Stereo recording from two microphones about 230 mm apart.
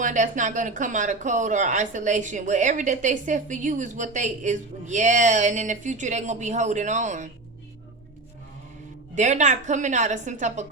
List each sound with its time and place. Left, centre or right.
0.0 s speech: right
9.1 s speech: right